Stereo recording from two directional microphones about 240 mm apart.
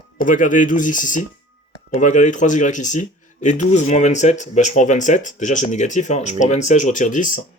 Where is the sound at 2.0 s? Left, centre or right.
Left.